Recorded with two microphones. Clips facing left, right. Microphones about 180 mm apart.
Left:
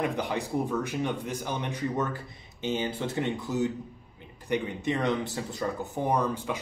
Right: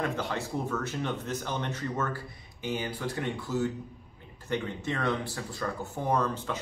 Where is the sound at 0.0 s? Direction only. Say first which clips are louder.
Left 2 dB; 15° left (ahead or behind).